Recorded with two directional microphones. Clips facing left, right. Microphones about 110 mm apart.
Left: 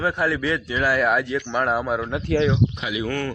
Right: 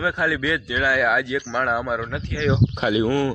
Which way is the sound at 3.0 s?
15° right (ahead or behind).